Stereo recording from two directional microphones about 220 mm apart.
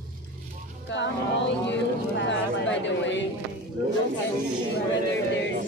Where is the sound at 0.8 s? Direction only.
55° left (ahead or behind).